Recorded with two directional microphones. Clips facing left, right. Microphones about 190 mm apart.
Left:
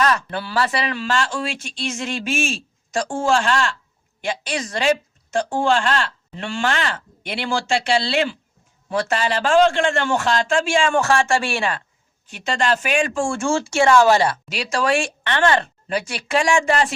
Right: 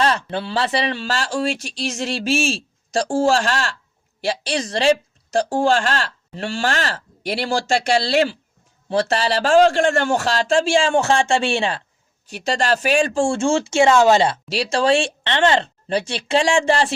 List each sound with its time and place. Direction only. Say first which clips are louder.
0.0 s a woman's voice: right 1 dB; 25° right (ahead or behind)
12.2 s speech: right 1 dB; 35° right (ahead or behind)